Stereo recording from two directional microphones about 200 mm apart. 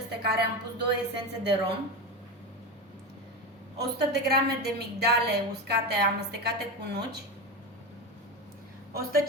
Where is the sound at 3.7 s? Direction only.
55° right (ahead or behind).